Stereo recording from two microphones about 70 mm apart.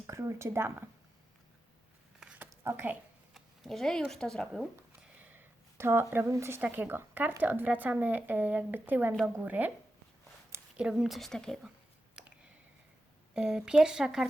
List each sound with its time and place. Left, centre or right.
0.1 s speech: right
2.5 s a sound: right
3.3 s a sound: centre
4.1 s speech: centre
5.3 s a sound: right
6.3 s speech: right
6.6 s speech: right
10.8 s speech: centre
11.3 s speech: centre
13.3 s speech: centre